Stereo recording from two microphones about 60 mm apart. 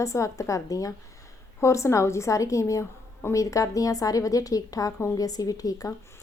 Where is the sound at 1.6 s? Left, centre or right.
Left.